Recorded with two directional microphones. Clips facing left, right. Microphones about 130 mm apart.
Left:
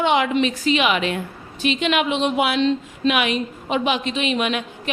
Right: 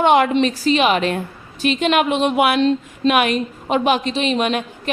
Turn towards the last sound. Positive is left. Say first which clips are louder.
# right 3 dB
turn(degrees=-40)  # may be behind; listen again after turning